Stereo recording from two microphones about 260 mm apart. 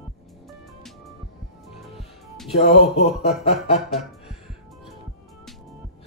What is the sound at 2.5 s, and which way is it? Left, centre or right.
Music, left.